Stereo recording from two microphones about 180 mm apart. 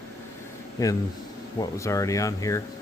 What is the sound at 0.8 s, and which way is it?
Speech, 15° left (ahead or behind).